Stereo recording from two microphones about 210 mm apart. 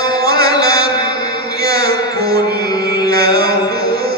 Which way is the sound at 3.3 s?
15° left (ahead or behind).